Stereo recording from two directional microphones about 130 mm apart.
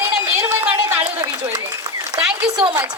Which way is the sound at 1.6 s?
25° right (ahead or behind).